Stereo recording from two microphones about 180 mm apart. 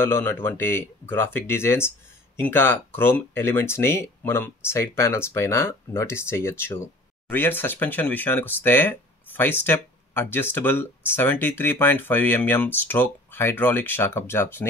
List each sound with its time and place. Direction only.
0.0 s speech: 10° left (ahead or behind)